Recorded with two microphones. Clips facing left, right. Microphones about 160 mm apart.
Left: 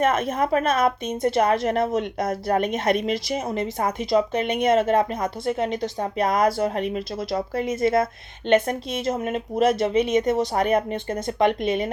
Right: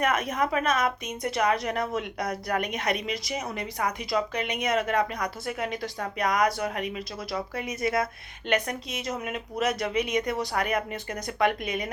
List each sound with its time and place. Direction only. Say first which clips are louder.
0.0 s a woman's voice: left 5 dB; 25° left (ahead or behind)
2.9 s a woman's voice: left 7 dB; 50° left (ahead or behind)
3.4 s a woman's voice: left 6 dB; 25° left (ahead or behind)